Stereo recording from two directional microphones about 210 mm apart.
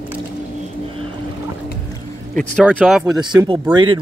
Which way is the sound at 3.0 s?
20° right (ahead or behind).